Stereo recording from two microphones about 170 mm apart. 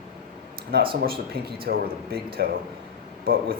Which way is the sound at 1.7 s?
60° right (ahead or behind).